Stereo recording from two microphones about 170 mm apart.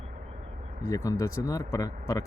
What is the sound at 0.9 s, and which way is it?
Speech, 20° left (ahead or behind).